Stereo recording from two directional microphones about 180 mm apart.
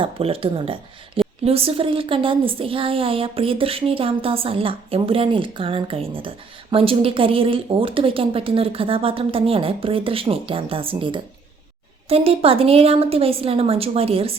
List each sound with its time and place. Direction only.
0.0 s speech: 30° right (ahead or behind)